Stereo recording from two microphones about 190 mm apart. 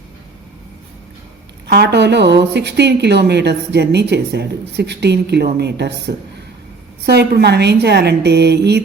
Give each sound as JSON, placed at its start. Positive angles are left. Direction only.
{"t": 1.6, "sound": "a woman's voice", "side_deg": -60}